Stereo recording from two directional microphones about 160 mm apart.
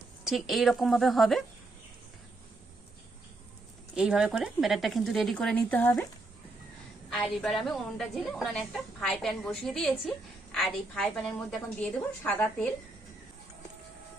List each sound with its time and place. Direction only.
0.3 s a woman's voice: centre (ahead or behind)
3.9 s a woman's voice: 5° right (ahead or behind)
7.1 s a woman's voice: 5° left (ahead or behind)